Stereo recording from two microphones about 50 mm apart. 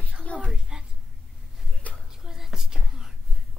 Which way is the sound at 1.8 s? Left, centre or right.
Left.